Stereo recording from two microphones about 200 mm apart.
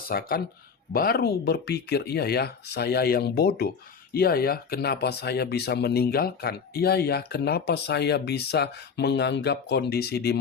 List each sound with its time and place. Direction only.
0.1 s speech: 45° left (ahead or behind)